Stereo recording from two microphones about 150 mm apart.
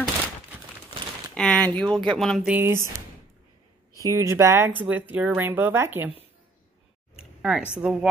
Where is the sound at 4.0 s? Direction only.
20° right (ahead or behind).